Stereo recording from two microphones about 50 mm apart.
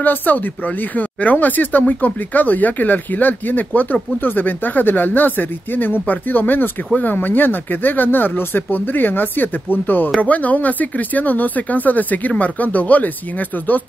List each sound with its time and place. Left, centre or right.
0.0 s speech: left
10.1 s speech: left